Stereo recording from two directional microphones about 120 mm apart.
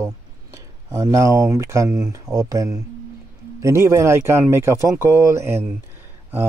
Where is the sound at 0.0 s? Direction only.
25° right (ahead or behind).